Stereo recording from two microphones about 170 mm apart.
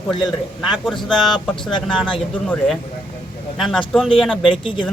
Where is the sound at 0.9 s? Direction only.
Centre (ahead or behind).